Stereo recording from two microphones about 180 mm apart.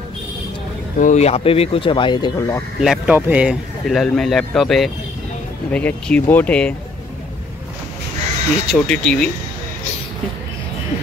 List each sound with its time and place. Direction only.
0.9 s speech: 45° left (ahead or behind); by 2.6 s 20° left (ahead or behind)
2.8 s a man's voice: 5° right (ahead or behind)
8.6 s a man's voice: 5° left (ahead or behind)